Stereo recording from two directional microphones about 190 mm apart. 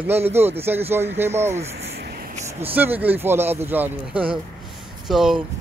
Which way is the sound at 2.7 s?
10° right (ahead or behind).